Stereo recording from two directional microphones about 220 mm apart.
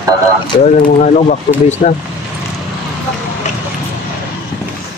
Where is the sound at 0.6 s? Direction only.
30° left (ahead or behind).